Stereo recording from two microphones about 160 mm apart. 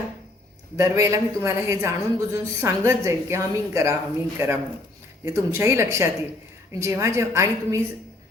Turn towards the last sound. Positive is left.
turn(degrees=-20)  # may be behind; listen again after turning